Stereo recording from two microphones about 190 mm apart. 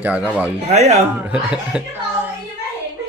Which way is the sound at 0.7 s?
35° right (ahead or behind).